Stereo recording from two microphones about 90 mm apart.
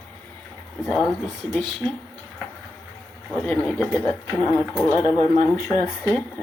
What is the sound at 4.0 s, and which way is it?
A man's voice, 30° left (ahead or behind).